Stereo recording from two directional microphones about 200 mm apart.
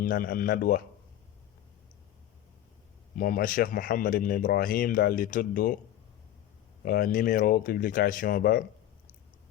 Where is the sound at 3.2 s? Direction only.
45° left (ahead or behind).